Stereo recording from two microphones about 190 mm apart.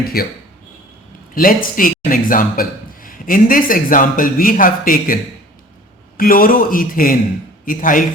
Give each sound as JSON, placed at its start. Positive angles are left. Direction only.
{"t": 0.1, "sound": "speech", "side_deg": 55}
{"t": 1.4, "sound": "a man's voice", "side_deg": 45}